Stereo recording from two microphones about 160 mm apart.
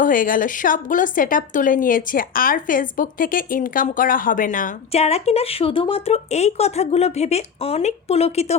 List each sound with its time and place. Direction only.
0.0 s a woman's voice: 60° left (ahead or behind)
4.9 s speech: 40° left (ahead or behind)